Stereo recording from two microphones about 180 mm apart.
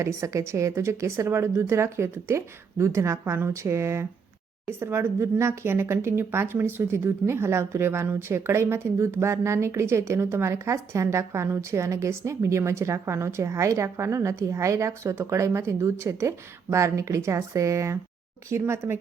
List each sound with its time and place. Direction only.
0.0 s a woman's voice: 15° right (ahead or behind)